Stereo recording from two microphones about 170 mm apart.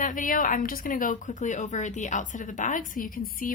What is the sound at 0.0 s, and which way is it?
A woman's voice, 50° left (ahead or behind).